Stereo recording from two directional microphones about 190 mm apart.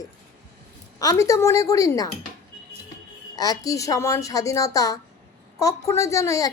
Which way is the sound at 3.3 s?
20° left (ahead or behind).